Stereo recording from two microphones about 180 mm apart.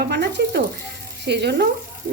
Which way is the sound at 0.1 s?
70° right (ahead or behind).